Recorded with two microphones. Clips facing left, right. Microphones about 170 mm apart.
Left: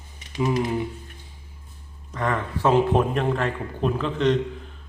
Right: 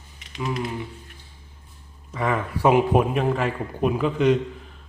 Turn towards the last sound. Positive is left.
turn(degrees=-10)  # may be behind; listen again after turning